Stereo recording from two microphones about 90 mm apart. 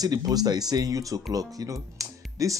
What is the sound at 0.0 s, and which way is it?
Speech, 45° right (ahead or behind).